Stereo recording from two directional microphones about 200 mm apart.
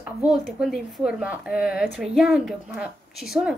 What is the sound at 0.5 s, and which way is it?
A woman's voice, centre (ahead or behind).